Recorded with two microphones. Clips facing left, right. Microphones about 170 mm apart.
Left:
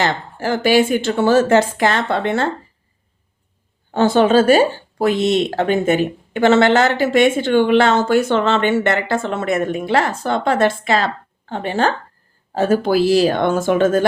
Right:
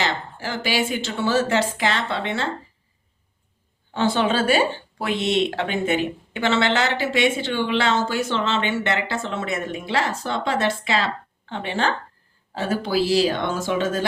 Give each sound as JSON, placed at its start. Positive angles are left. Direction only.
{"t": 0.0, "sound": "speech", "side_deg": 50}
{"t": 3.9, "sound": "speech", "side_deg": 45}